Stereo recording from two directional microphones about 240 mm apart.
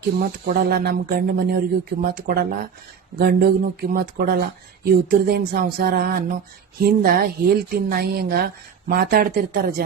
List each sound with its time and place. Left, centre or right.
0.2 s speech: right